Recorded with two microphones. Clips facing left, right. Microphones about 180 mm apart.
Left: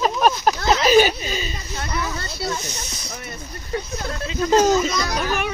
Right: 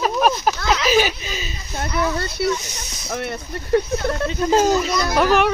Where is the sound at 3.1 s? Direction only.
65° right (ahead or behind).